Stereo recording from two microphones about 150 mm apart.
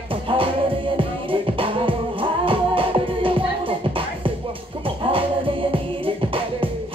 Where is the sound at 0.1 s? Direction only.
35° right (ahead or behind).